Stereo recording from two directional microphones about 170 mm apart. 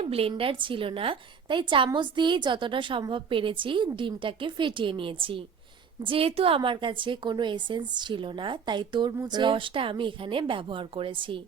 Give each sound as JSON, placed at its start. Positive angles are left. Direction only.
{"t": 0.0, "sound": "a woman's voice", "side_deg": -35}